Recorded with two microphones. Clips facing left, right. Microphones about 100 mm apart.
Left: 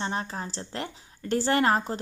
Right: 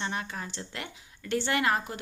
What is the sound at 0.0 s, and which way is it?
A woman's voice, 35° left (ahead or behind).